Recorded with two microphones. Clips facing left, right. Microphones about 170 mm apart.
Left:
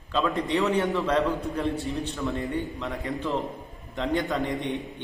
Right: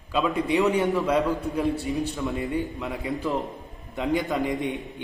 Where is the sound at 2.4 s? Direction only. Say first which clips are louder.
Right 2 dB; 10° right (ahead or behind).